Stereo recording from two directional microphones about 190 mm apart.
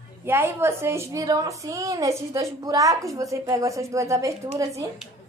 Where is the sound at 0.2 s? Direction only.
15° right (ahead or behind).